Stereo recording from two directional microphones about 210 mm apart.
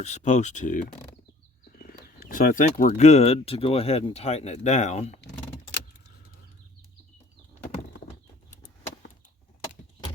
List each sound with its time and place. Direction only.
0.0 s speech: 30° left (ahead or behind)